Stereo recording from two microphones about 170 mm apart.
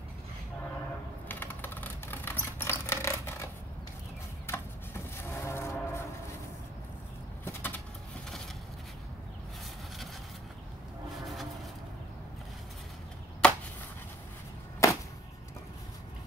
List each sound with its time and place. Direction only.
1.3 s a sound: 10° left (ahead or behind)
4.5 s train: 15° left (ahead or behind)
7.4 s bird: 10° left (ahead or behind)
13.4 s chop: 5° left (ahead or behind)
14.8 s whip: 20° left (ahead or behind)